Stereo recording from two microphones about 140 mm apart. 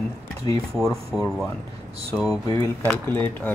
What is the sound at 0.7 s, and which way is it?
Speech, centre (ahead or behind).